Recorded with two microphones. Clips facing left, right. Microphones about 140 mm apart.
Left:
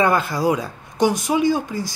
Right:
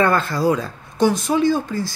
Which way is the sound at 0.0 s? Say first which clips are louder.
Right 1 dB; 15° left (ahead or behind).